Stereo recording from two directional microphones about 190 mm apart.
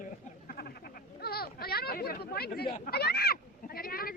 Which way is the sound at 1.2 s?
55° left (ahead or behind).